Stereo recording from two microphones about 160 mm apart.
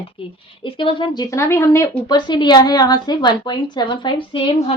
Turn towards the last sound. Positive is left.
turn(degrees=30)  # may be behind; listen again after turning